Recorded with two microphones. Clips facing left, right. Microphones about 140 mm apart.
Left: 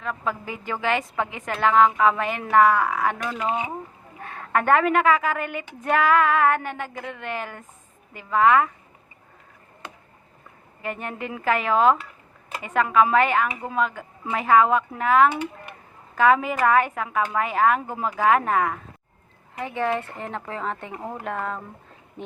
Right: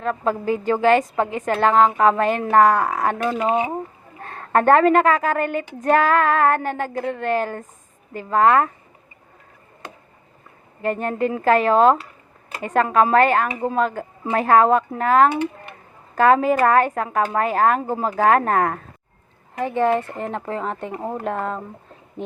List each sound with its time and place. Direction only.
0.0 s a woman's voice: 40° right (ahead or behind)
11.0 s a woman's voice: 40° right (ahead or behind)
19.8 s speech: 15° right (ahead or behind)